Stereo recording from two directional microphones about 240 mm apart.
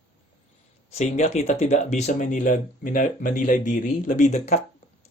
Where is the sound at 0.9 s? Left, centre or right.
Left.